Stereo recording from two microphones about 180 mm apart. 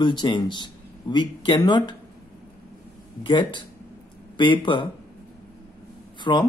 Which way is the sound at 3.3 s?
25° left (ahead or behind).